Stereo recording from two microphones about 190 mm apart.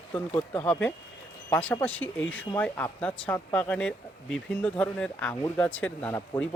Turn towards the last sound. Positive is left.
turn(degrees=15)  # may be behind; listen again after turning